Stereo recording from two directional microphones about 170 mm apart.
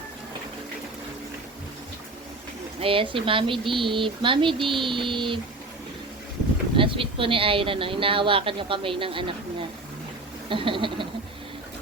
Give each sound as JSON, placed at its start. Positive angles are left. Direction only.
{"t": 2.8, "sound": "speech", "side_deg": -30}
{"t": 6.7, "sound": "a woman's voice", "side_deg": -30}
{"t": 10.5, "sound": "speech", "side_deg": -30}